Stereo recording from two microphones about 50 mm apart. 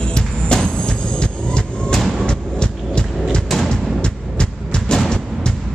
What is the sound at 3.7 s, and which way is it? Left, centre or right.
Music, centre.